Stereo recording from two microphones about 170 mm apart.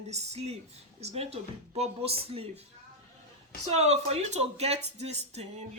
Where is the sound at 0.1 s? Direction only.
40° right (ahead or behind).